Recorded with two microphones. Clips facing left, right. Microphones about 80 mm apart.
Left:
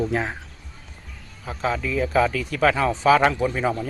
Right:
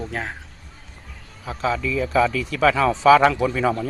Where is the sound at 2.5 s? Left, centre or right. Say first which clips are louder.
Right 2 dB; right.